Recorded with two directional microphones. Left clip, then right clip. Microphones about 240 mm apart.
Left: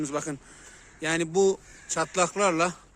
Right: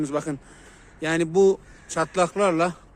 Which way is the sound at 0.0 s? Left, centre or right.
Centre.